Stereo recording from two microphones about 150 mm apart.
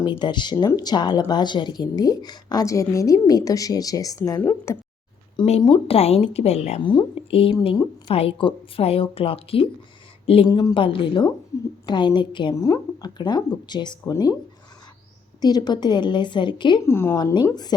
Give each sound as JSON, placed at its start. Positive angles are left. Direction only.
{"t": 0.0, "sound": "speech", "side_deg": 30}
{"t": 5.5, "sound": "a woman's voice", "side_deg": 40}
{"t": 10.5, "sound": "a woman's voice", "side_deg": 25}
{"t": 15.4, "sound": "speech", "side_deg": 25}
{"t": 16.8, "sound": "a woman's voice", "side_deg": 15}